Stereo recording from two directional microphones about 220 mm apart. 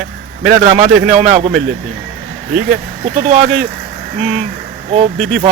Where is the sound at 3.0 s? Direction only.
30° right (ahead or behind).